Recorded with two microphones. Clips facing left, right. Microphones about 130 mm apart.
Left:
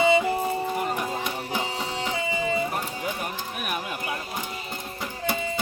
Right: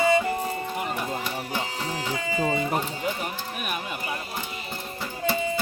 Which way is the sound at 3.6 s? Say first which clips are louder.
Left 1 dB; centre (ahead or behind).